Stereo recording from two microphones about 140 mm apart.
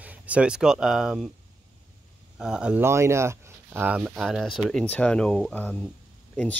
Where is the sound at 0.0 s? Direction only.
10° right (ahead or behind).